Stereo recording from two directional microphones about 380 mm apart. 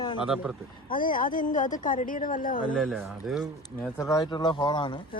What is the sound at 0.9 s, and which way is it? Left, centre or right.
A woman's voice, left.